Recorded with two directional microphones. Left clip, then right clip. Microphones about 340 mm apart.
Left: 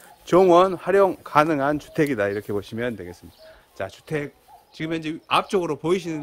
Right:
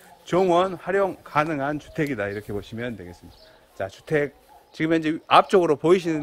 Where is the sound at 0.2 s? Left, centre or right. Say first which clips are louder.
Left 5 dB; centre.